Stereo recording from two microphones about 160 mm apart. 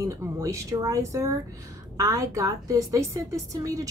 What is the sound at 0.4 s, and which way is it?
A woman's voice, 20° right (ahead or behind).